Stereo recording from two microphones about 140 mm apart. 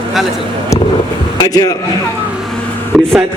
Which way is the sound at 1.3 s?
25° left (ahead or behind).